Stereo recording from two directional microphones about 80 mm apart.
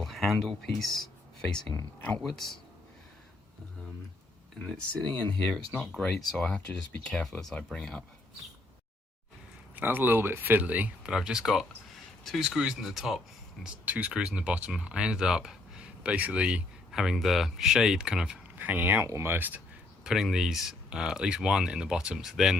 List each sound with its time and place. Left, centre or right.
0.0 s speech: centre
0.9 s a sound: centre
2.2 s speech: centre
5.0 s speech: centre
9.7 s speech: right; by 12.5 s centre
12.5 s speech: centre
13.8 s speech: centre
18.5 s speech: right
19.0 s speech: right
20.1 s speech: centre